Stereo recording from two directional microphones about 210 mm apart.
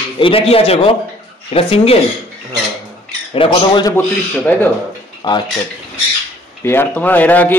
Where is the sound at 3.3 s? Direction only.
25° left (ahead or behind).